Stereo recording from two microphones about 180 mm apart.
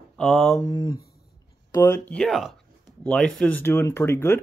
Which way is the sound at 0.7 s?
25° left (ahead or behind).